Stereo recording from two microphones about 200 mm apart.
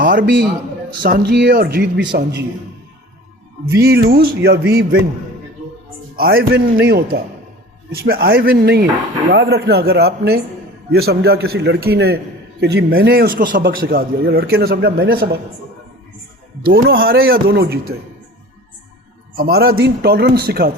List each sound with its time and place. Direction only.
0.0 s a man's voice: 45° right (ahead or behind)
3.8 s a man's voice: 50° right (ahead or behind)
6.1 s a man's voice: 50° right (ahead or behind)
16.6 s a man's voice: 50° right (ahead or behind)
19.4 s a man's voice: 50° right (ahead or behind)